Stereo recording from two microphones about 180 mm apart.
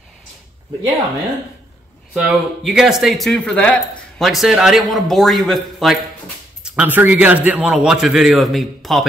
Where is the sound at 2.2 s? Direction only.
5° right (ahead or behind).